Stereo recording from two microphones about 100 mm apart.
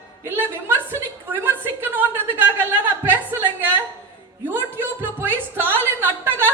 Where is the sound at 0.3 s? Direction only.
20° right (ahead or behind).